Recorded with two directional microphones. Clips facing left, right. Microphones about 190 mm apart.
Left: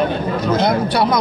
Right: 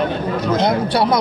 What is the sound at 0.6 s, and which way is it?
Speech, 30° right (ahead or behind).